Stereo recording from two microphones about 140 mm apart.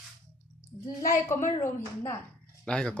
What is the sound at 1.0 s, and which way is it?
A woman's voice, 20° left (ahead or behind).